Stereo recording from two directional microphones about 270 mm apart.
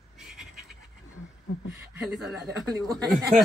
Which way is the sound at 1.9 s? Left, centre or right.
Centre.